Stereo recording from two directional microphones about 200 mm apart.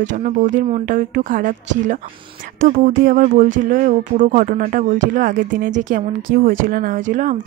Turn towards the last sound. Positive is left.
turn(degrees=-40)  # may be behind; listen again after turning